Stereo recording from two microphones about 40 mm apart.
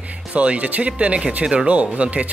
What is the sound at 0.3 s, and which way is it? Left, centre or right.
Speech, right.